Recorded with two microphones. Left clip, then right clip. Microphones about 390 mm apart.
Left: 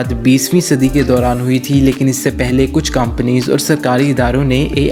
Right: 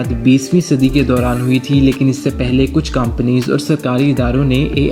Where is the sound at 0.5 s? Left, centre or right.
Left.